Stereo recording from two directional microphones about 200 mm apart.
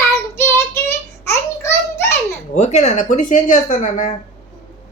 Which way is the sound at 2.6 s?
35° left (ahead or behind).